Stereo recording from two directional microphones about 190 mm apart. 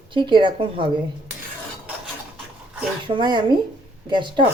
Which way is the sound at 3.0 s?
25° right (ahead or behind).